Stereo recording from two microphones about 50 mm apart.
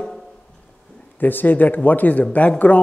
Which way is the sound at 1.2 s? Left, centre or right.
Left.